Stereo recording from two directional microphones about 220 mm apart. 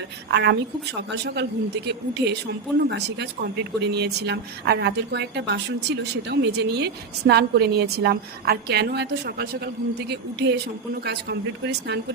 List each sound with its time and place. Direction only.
0.3 s speech: 50° right (ahead or behind)